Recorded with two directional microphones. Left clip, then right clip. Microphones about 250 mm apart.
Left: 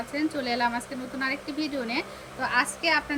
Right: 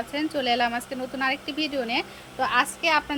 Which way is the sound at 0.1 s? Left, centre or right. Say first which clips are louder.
Right 4 dB; centre.